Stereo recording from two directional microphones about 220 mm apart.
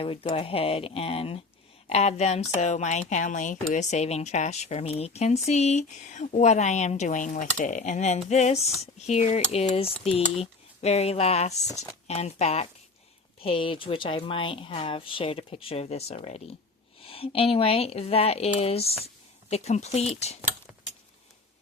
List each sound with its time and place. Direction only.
0.0 s speech: 25° left (ahead or behind)